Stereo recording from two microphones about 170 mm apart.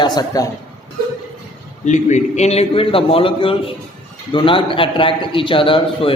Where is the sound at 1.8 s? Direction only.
45° left (ahead or behind).